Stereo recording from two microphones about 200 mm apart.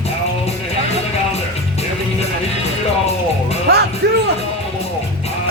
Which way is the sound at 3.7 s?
55° right (ahead or behind).